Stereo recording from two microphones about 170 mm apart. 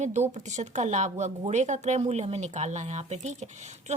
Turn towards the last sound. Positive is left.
turn(degrees=-40)  # may be behind; listen again after turning